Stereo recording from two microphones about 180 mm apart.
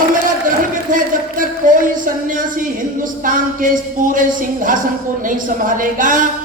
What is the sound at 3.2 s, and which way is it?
A man's voice, 45° right (ahead or behind).